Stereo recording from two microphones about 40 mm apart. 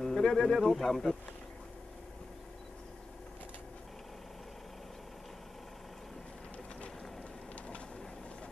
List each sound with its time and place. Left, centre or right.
0.0 s speech: centre